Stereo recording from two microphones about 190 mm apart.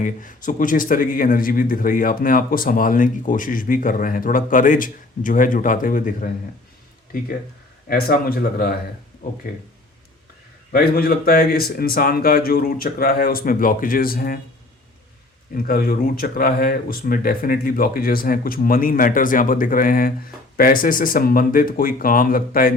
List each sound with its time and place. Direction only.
0.0 s a man's voice: 45° left (ahead or behind)
7.9 s a man's voice: 50° left (ahead or behind)
10.7 s a man's voice: 50° left (ahead or behind)
15.5 s a man's voice: 50° left (ahead or behind)